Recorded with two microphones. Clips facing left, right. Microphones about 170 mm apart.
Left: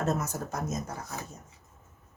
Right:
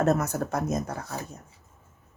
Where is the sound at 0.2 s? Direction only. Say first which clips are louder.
Right 6 dB; 65° right (ahead or behind).